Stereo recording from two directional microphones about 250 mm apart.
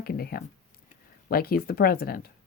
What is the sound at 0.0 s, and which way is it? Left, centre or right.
Speech, left.